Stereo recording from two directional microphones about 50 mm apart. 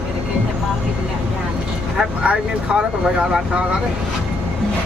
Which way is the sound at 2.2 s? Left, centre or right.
Right.